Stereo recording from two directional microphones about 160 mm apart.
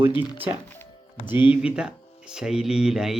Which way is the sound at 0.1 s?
30° left (ahead or behind).